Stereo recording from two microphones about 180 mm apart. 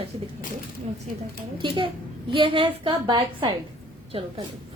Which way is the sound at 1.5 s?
30° right (ahead or behind).